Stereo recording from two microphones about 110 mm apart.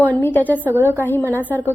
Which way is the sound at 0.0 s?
20° left (ahead or behind).